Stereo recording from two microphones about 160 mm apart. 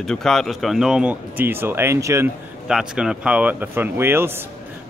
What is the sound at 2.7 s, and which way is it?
Speech, 5° right (ahead or behind).